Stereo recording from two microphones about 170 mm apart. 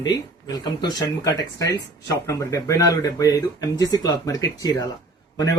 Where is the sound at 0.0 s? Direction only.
25° left (ahead or behind).